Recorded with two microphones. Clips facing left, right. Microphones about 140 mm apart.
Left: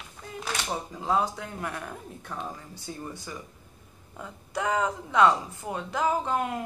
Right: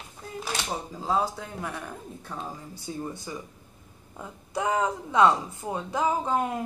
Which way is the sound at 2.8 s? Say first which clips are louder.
Right 4 dB; 15° right (ahead or behind).